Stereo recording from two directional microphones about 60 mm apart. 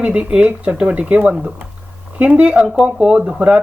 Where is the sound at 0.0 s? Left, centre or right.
Centre.